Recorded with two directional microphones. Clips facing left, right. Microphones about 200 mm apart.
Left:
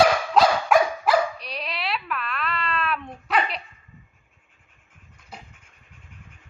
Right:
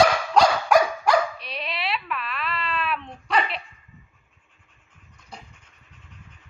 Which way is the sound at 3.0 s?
5° left (ahead or behind).